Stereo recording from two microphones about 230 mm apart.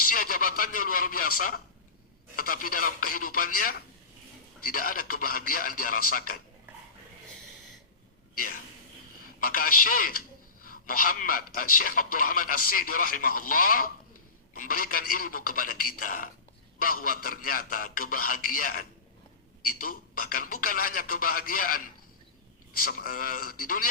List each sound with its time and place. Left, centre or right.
0.1 s a man's voice: left
9.4 s a man's voice: left
22.8 s a man's voice: left